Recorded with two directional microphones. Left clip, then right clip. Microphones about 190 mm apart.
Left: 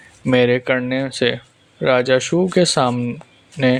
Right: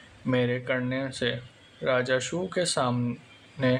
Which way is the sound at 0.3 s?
45° left (ahead or behind).